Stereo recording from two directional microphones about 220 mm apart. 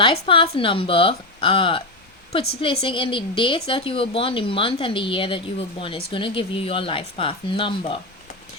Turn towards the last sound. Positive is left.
turn(degrees=25)  # may be behind; listen again after turning